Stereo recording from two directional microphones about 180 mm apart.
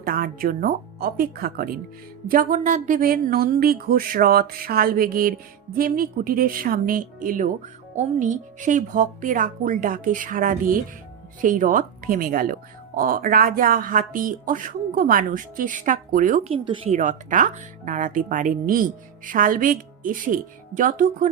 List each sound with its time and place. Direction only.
0.0 s speech: 55° right (ahead or behind)
16.4 s speech: 30° right (ahead or behind)
17.0 s speech: 45° right (ahead or behind)